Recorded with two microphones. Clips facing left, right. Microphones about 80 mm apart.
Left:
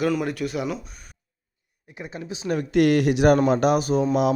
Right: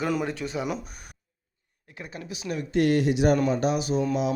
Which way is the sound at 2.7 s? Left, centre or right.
Left.